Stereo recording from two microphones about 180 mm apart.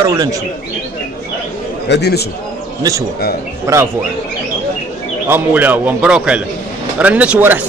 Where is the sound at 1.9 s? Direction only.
65° left (ahead or behind).